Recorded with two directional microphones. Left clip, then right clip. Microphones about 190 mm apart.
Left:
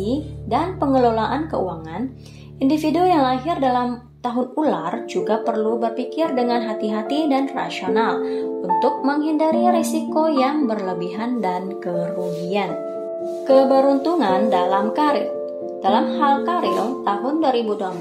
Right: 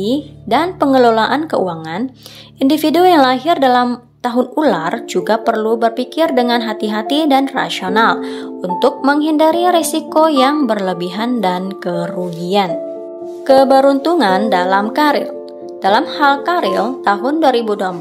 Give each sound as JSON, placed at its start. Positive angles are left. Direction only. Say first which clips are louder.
{"t": 0.0, "sound": "a woman's voice", "louder": "right 6 dB", "side_deg": -45}